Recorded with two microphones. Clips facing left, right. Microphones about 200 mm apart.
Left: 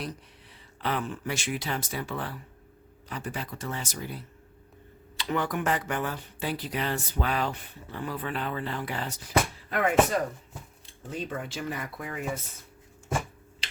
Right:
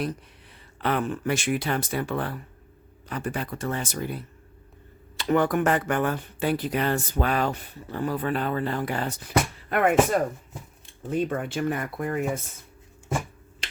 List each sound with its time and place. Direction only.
0.8 s speech: 55° right (ahead or behind)
11.2 s speech: 55° right (ahead or behind)